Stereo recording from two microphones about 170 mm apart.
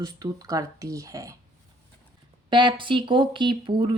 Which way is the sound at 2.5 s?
25° right (ahead or behind).